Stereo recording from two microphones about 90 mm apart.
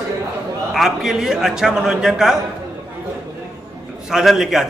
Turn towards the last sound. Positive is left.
turn(degrees=-5)  # may be behind; listen again after turning